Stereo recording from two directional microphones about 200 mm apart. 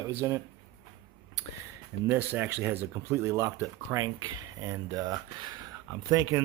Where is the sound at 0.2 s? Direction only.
15° right (ahead or behind).